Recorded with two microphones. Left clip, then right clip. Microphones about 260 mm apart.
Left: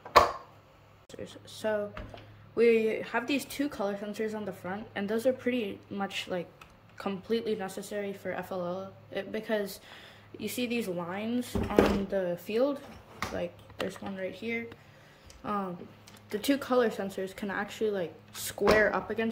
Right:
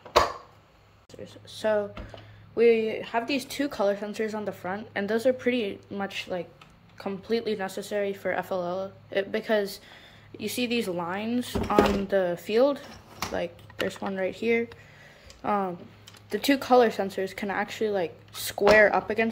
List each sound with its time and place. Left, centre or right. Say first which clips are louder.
1.2 s speech: right 5 dB; centre